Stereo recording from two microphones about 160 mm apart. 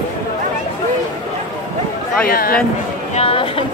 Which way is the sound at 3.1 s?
35° left (ahead or behind).